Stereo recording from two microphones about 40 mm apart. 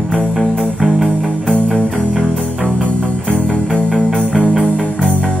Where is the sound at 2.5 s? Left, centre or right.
Left.